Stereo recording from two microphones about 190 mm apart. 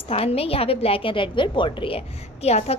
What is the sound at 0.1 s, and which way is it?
A woman's voice, 30° left (ahead or behind).